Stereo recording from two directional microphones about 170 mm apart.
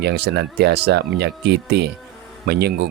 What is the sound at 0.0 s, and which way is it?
Speech, 75° right (ahead or behind).